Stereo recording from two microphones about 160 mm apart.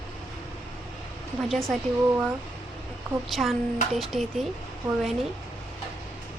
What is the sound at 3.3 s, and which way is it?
Speech, centre (ahead or behind).